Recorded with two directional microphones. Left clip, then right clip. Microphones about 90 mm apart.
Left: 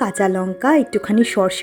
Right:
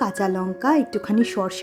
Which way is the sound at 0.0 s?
35° left (ahead or behind).